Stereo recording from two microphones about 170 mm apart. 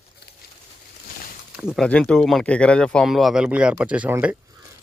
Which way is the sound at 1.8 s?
5° left (ahead or behind).